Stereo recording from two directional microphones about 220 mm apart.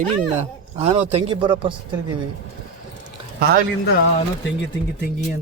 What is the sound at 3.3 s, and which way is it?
Speech, 45° right (ahead or behind).